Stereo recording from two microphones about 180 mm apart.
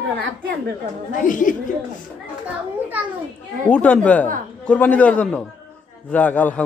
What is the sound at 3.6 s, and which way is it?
A man's voice, 10° left (ahead or behind).